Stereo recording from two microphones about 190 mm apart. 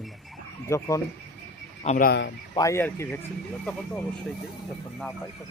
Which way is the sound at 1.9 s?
50° left (ahead or behind).